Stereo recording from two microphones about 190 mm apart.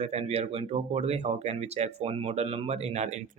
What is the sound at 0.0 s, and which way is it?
Speech, 35° right (ahead or behind).